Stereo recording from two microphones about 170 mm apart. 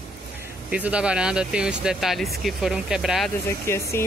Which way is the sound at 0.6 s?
5° right (ahead or behind).